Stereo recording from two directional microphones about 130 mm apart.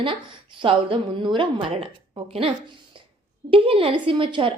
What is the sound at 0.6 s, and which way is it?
A woman's voice, 40° right (ahead or behind).